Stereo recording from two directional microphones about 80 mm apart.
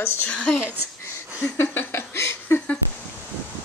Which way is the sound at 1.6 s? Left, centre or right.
Left.